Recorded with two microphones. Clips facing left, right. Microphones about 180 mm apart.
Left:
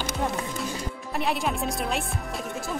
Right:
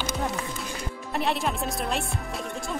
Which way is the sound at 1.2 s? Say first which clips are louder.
Even; centre (ahead or behind).